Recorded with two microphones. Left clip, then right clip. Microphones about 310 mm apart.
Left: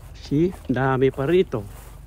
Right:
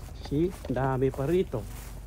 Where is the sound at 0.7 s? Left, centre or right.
Left.